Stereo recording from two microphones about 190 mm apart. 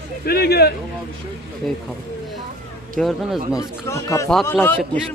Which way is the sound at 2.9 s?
Centre (ahead or behind).